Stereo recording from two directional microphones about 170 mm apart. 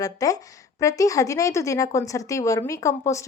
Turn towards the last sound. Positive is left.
turn(degrees=15)  # may be behind; listen again after turning